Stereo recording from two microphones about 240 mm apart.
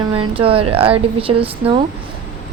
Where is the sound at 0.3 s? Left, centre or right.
Right.